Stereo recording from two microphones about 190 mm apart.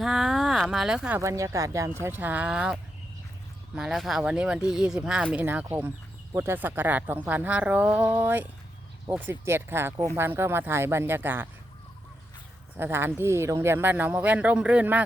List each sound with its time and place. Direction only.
0.0 s speech: centre (ahead or behind)
3.8 s speech: centre (ahead or behind)
12.7 s speech: 10° right (ahead or behind)